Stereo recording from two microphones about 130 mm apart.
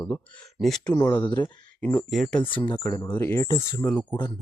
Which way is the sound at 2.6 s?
30° left (ahead or behind).